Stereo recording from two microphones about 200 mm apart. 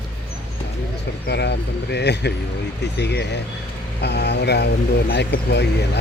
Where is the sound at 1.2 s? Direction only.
55° left (ahead or behind).